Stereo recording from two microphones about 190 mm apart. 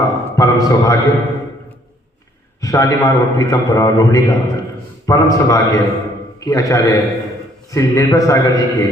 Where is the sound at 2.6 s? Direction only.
15° left (ahead or behind).